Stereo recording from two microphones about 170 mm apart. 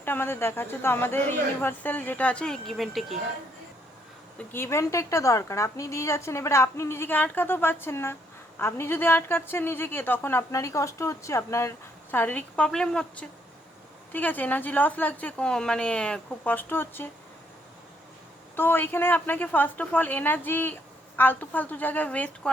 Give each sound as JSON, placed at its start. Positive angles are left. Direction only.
{"t": 0.0, "sound": "a woman's voice", "side_deg": 10}
{"t": 4.4, "sound": "a woman's voice", "side_deg": 15}
{"t": 18.5, "sound": "a woman's voice", "side_deg": 10}